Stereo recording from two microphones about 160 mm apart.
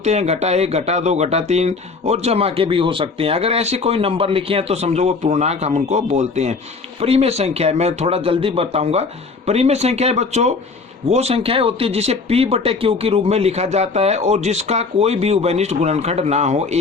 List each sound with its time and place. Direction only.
0.0 s speech: 45° right (ahead or behind)